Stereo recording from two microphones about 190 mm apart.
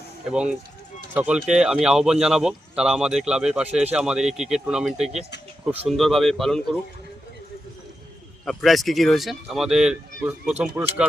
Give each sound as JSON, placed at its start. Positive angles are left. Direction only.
{"t": 0.3, "sound": "speech", "side_deg": -5}
{"t": 8.4, "sound": "speech", "side_deg": 0}